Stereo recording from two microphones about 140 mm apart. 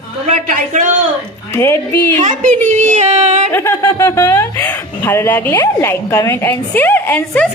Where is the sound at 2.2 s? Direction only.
55° right (ahead or behind).